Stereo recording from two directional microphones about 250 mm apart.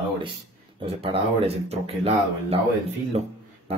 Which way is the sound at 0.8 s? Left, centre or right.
Right.